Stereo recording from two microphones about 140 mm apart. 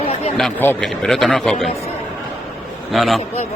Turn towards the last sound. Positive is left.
turn(degrees=0)  # may be behind; listen again after turning